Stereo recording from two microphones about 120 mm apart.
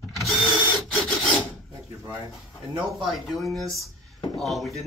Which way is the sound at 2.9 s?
Centre (ahead or behind).